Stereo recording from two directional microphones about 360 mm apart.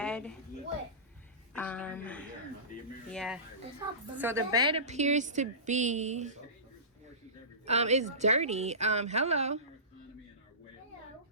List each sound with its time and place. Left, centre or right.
0.0 s a sound: centre
1.5 s a woman's voice: centre
7.6 s a woman's voice: centre